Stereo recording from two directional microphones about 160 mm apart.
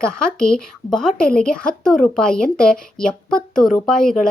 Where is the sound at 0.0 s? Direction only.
5° left (ahead or behind).